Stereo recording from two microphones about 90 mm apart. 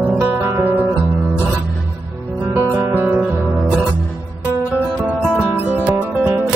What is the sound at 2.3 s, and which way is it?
Guitar, 25° right (ahead or behind).